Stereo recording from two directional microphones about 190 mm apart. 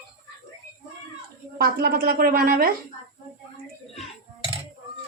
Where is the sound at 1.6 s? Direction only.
50° right (ahead or behind).